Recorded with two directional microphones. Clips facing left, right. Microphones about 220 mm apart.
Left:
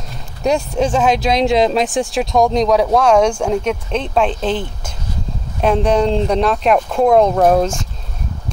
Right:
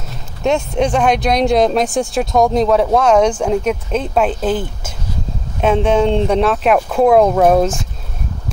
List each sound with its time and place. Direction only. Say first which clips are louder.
0.4 s speech: right 1 dB; centre (ahead or behind)